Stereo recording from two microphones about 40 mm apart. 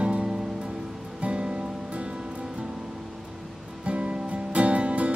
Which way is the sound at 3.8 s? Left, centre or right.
Right.